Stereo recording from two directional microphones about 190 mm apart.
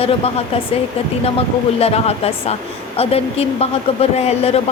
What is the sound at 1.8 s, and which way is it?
Speech, 30° left (ahead or behind).